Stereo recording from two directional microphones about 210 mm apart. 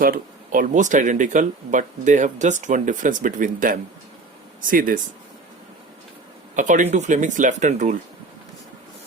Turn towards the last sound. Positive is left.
turn(degrees=-35)  # may be behind; listen again after turning